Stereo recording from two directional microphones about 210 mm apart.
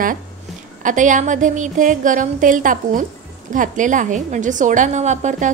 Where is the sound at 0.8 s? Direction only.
35° right (ahead or behind).